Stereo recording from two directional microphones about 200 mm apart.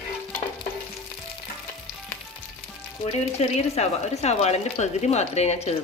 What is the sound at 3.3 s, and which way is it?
Speech, 35° left (ahead or behind).